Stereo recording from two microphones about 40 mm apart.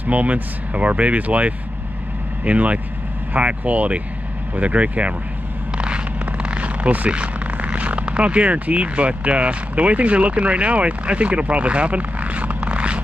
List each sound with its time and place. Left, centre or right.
0.0 s speech: right
5.8 s vehicle: right
7.1 s speech: right
12.5 s scrape: right